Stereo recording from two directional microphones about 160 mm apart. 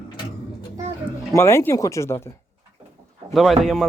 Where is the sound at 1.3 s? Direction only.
15° left (ahead or behind).